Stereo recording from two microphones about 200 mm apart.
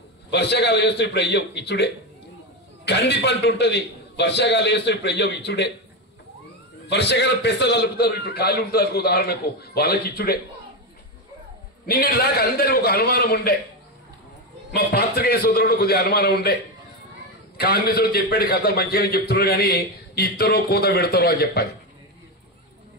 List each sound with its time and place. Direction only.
0.3 s a man's voice: 55° left (ahead or behind)
6.9 s a man's voice: 60° left (ahead or behind)
11.8 s a man's voice: 50° left (ahead or behind)
14.7 s a man's voice: 50° left (ahead or behind)
17.6 s a man's voice: 50° left (ahead or behind)